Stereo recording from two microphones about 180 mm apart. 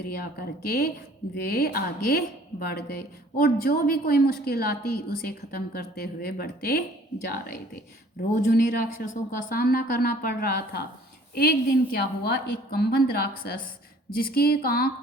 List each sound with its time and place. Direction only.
0.2 s a woman's voice: 60° left (ahead or behind)
8.4 s a woman's voice: 50° left (ahead or behind)